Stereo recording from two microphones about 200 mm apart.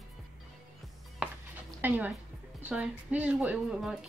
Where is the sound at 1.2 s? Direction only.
5° right (ahead or behind).